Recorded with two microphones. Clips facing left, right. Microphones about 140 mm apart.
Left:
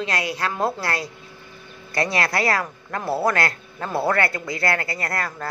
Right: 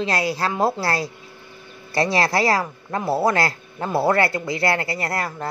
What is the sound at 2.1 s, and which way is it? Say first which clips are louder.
Speech: right 3 dB; 30° right (ahead or behind).